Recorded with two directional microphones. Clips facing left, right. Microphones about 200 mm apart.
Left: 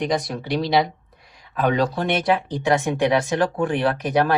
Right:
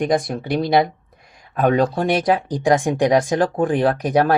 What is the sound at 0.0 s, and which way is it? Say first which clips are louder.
Speech: right 4 dB; 50° right (ahead or behind).